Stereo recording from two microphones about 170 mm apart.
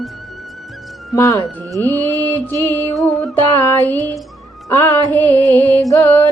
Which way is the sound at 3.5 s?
10° left (ahead or behind).